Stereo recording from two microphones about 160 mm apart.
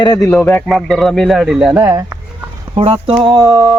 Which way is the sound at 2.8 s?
35° right (ahead or behind).